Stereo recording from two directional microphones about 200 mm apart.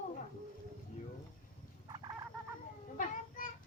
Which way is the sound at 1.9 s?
20° right (ahead or behind).